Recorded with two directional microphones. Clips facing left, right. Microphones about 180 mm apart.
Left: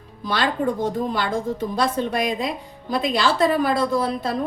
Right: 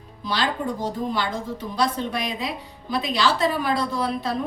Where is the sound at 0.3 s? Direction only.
55° left (ahead or behind).